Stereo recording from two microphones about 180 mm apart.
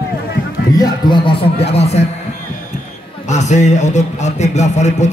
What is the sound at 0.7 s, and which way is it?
A man's voice, 25° left (ahead or behind).